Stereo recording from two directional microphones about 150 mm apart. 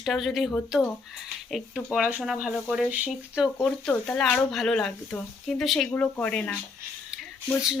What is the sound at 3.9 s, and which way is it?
Speech, 10° left (ahead or behind).